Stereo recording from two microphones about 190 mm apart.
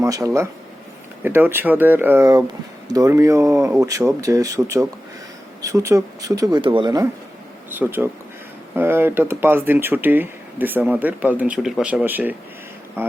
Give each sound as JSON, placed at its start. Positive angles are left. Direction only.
{"t": 0.0, "sound": "speech", "side_deg": -15}